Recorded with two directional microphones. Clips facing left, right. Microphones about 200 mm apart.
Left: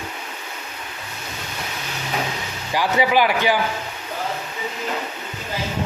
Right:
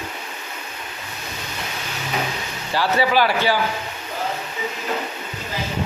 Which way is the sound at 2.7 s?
15° left (ahead or behind).